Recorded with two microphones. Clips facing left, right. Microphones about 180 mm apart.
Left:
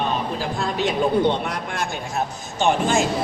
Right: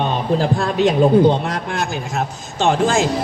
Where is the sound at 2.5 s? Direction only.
90° right.